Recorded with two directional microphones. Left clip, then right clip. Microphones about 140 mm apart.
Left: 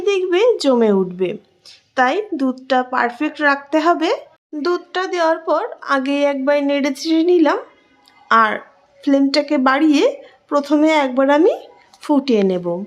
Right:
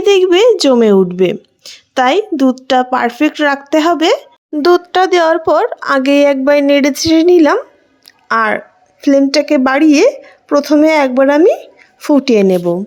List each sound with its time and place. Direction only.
0.0 s speech: 55° right (ahead or behind); by 12.8 s 35° right (ahead or behind)